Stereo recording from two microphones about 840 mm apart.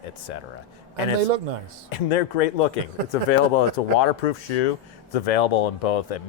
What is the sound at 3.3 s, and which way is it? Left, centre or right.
Speech, left.